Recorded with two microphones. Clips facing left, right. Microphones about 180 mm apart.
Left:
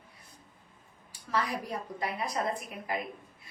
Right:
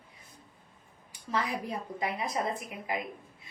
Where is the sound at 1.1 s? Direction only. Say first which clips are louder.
Left 1 dB; 20° right (ahead or behind).